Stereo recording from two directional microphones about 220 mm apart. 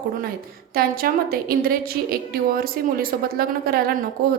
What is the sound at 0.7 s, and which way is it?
A woman's voice, 40° right (ahead or behind).